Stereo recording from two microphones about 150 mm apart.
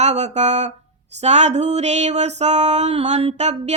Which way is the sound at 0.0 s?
50° right (ahead or behind).